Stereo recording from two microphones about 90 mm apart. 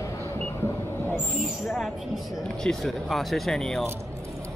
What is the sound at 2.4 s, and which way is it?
Speech, 5° left (ahead or behind).